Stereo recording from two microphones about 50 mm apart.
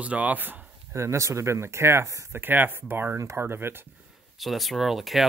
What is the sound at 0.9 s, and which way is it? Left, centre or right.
Speech, right.